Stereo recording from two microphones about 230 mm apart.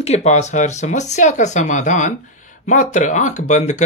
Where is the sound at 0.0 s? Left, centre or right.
Left.